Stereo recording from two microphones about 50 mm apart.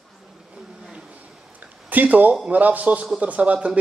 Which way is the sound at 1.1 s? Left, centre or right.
Right.